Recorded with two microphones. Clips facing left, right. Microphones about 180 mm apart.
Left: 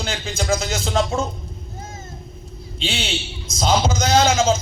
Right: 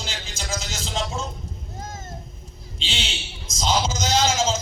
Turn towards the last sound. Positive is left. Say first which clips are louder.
# left 5 dB
turn(degrees=60)  # may be behind; listen again after turning